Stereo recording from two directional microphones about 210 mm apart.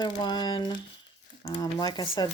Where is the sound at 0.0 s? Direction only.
20° left (ahead or behind).